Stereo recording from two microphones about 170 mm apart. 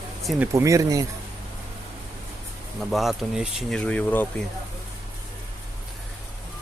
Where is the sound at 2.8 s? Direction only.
Centre (ahead or behind).